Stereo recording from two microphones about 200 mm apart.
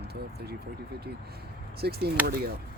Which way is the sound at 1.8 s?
55° right (ahead or behind).